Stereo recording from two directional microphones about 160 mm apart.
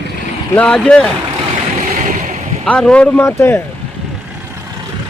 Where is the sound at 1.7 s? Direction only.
50° right (ahead or behind).